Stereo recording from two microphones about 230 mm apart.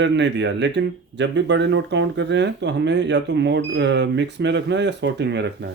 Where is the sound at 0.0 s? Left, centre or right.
Right.